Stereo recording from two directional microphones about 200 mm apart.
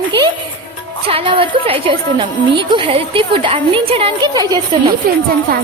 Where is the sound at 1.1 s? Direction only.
30° right (ahead or behind).